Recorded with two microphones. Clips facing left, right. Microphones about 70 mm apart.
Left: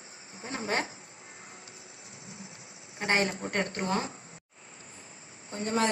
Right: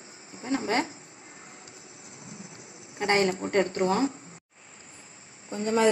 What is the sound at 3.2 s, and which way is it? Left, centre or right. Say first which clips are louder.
Speech: right 5 dB; right.